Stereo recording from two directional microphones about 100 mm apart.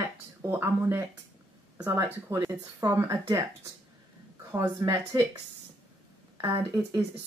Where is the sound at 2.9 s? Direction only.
30° right (ahead or behind).